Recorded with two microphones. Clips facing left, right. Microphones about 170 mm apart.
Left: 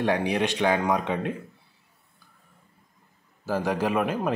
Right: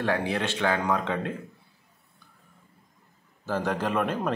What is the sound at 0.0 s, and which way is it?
Speech, 15° left (ahead or behind).